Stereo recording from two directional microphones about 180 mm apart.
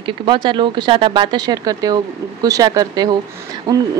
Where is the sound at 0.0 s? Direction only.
30° right (ahead or behind).